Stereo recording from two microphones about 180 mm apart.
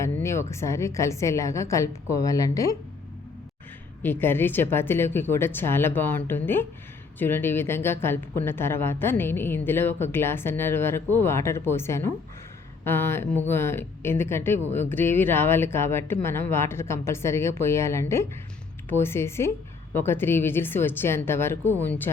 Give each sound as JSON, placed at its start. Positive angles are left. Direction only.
{"t": 0.0, "sound": "a woman's voice", "side_deg": 15}
{"t": 4.0, "sound": "a woman's voice", "side_deg": 10}